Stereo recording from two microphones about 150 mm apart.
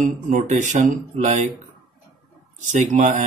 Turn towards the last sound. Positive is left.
turn(degrees=-55)  # may be behind; listen again after turning